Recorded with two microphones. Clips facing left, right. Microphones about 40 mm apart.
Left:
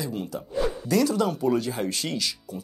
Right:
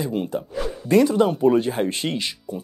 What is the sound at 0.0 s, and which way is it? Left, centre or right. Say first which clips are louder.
Speech: right 6 dB; right.